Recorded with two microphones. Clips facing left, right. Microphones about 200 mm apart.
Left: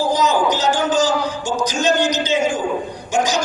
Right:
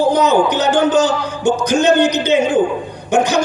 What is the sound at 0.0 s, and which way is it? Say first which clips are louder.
A man's voice: right 4 dB; 60° right (ahead or behind).